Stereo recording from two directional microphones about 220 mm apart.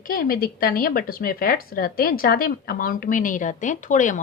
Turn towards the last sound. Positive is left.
turn(degrees=35)  # may be behind; listen again after turning